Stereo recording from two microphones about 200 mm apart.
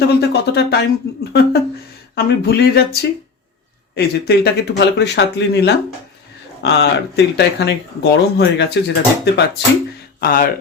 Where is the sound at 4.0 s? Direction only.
55° left (ahead or behind).